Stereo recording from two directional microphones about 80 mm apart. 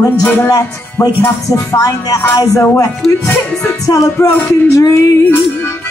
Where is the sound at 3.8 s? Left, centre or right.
Left.